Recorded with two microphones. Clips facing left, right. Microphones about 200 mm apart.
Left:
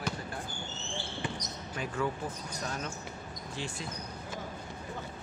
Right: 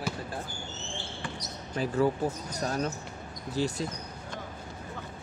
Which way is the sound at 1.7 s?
35° right (ahead or behind).